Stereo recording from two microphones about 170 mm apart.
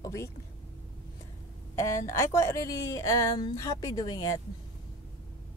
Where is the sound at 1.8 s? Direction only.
15° left (ahead or behind).